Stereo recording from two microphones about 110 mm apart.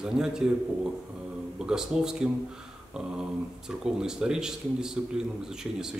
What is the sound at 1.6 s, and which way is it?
Speech, 5° right (ahead or behind).